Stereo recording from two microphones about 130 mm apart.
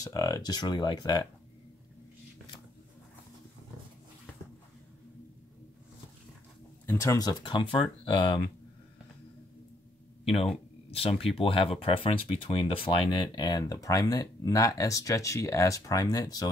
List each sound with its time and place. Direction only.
0.0 s speech: 30° left (ahead or behind)
6.9 s speech: 25° left (ahead or behind); by 8.4 s 40° left (ahead or behind)
10.2 s speech: 45° left (ahead or behind); by 16.4 s 30° left (ahead or behind)